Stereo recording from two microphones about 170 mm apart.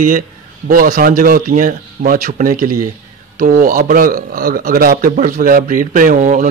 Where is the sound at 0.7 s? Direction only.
55° right (ahead or behind).